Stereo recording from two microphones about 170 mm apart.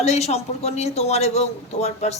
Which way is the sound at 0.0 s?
40° left (ahead or behind).